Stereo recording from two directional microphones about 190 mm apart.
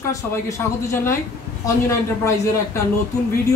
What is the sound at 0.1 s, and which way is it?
Speech, 15° left (ahead or behind).